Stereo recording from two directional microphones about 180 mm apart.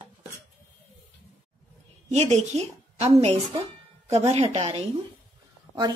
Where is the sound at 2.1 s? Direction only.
35° right (ahead or behind).